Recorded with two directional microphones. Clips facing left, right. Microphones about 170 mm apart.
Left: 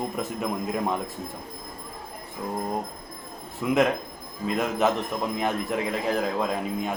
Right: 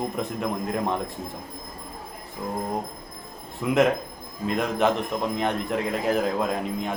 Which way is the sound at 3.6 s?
Centre (ahead or behind).